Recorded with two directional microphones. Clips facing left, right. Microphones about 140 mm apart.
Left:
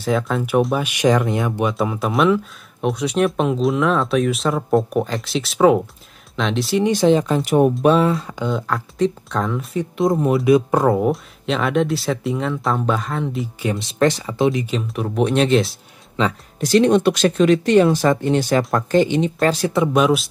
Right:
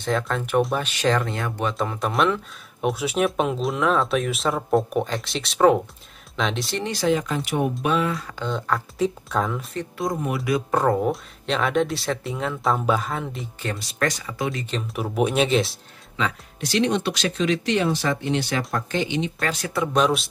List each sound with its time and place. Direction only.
0.0 s speech: 5° left (ahead or behind)
6.8 s speech: 20° left (ahead or behind)
7.4 s speech: 45° left (ahead or behind); by 8.5 s 20° left (ahead or behind)
8.5 s speech: centre (ahead or behind)
9.9 s speech: 25° left (ahead or behind)
10.7 s speech: 10° left (ahead or behind)
13.7 s speech: 25° left (ahead or behind)
14.7 s speech: centre (ahead or behind)
16.2 s speech: 40° left (ahead or behind)
19.9 s speech: 5° left (ahead or behind)